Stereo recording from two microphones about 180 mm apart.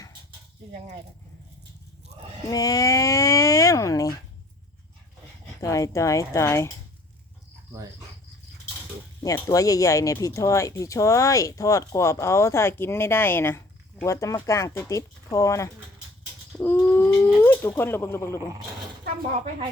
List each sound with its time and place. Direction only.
2.5 s speech: 20° left (ahead or behind)
5.5 s speech: 15° left (ahead or behind)
9.2 s speech: 20° left (ahead or behind)
16.5 s bird: 10° left (ahead or behind)
17.4 s speech: 10° left (ahead or behind)